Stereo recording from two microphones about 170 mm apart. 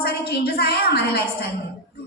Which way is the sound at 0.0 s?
65° left (ahead or behind).